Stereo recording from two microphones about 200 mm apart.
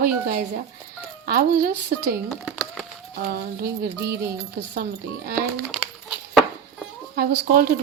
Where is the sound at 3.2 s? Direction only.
50° right (ahead or behind).